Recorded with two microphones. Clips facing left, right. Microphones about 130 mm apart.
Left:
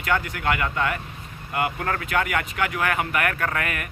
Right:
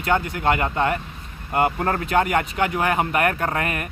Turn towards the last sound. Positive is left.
turn(degrees=-30)  # may be behind; listen again after turning